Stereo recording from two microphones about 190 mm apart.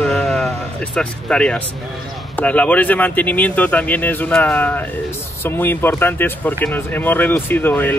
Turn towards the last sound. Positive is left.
turn(degrees=10)  # may be behind; listen again after turning